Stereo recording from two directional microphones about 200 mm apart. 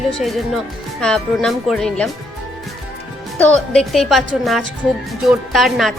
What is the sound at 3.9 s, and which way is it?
A woman's voice, centre (ahead or behind).